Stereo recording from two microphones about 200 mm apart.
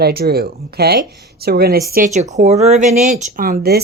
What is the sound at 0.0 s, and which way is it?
Speech, 50° right (ahead or behind).